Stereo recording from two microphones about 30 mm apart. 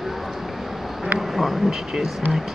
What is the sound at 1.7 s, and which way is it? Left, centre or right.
Speech, centre.